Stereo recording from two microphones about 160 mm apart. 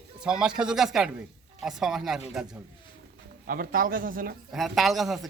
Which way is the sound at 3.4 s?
65° right (ahead or behind).